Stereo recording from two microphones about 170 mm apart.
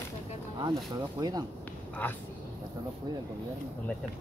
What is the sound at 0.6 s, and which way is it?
Speech, 25° right (ahead or behind).